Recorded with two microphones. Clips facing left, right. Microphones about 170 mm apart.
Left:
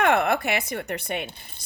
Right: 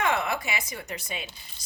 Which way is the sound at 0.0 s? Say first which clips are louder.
Left 6 dB; 60° left (ahead or behind).